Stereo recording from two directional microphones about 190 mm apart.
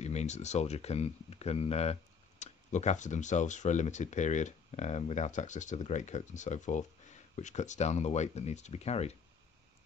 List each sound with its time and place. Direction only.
0.0 s speech: 35° left (ahead or behind)